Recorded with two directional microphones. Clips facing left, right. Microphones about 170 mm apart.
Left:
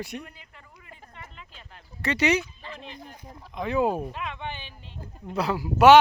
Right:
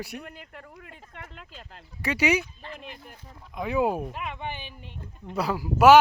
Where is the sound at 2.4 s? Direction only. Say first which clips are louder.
Even; 55° right (ahead or behind).